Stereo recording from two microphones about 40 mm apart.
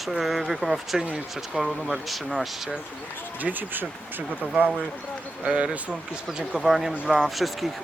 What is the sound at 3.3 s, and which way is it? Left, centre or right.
Speech, right.